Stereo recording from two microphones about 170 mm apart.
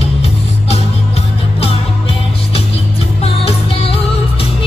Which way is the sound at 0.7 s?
40° left (ahead or behind).